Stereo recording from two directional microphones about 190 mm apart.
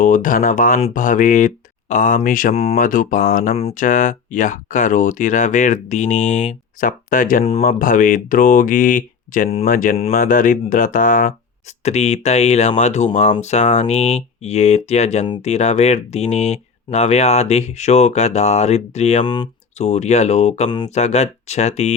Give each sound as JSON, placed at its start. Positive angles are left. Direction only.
{"t": 0.0, "sound": "speech", "side_deg": 45}
{"t": 3.8, "sound": "speech", "side_deg": 45}
{"t": 11.8, "sound": "speech", "side_deg": 35}
{"t": 19.2, "sound": "speech", "side_deg": 25}
{"t": 19.8, "sound": "speech", "side_deg": 35}
{"t": 20.7, "sound": "speech", "side_deg": 25}
{"t": 20.9, "sound": "speech", "side_deg": 35}